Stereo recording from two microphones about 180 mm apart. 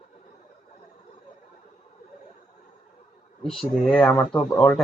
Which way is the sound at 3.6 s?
Centre (ahead or behind).